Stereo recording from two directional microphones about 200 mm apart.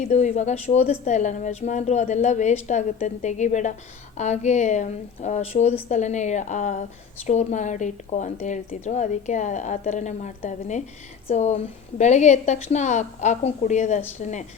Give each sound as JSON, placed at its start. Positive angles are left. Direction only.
{"t": 0.0, "sound": "speech", "side_deg": 35}